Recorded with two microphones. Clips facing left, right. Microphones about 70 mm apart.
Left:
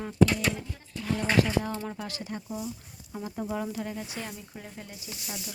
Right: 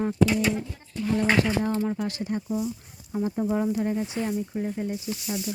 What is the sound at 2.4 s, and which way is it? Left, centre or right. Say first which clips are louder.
Speech: right 7 dB; centre.